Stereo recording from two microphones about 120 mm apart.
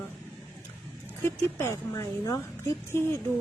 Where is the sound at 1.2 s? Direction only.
20° left (ahead or behind).